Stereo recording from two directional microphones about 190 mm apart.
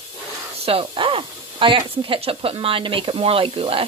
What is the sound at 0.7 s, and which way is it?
Speech, 30° right (ahead or behind).